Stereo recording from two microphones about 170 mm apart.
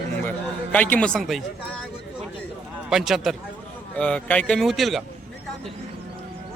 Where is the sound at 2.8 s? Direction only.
Centre (ahead or behind).